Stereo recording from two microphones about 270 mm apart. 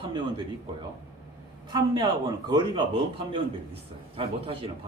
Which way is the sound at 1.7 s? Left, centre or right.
Centre.